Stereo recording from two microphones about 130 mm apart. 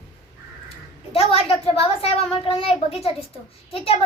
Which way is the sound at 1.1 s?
50° left (ahead or behind).